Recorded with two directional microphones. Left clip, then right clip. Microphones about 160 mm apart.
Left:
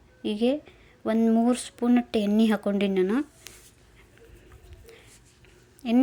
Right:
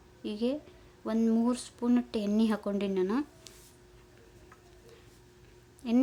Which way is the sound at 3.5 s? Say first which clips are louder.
Left 6 dB; 50° left (ahead or behind).